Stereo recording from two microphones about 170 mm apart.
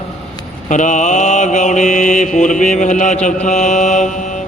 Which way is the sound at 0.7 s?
45° left (ahead or behind).